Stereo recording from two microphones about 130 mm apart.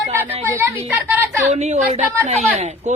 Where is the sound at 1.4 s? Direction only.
60° right (ahead or behind).